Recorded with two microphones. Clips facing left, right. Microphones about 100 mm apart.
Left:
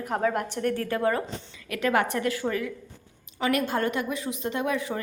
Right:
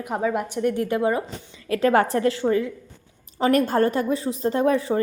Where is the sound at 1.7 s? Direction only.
35° right (ahead or behind).